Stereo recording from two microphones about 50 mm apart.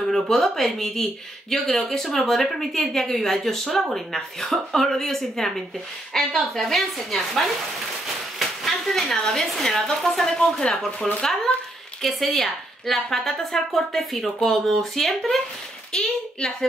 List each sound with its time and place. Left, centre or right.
0.0 s speech: centre
15.9 s a child's voice: centre